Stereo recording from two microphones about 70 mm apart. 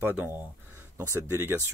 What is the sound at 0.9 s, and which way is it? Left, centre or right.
Speech, right.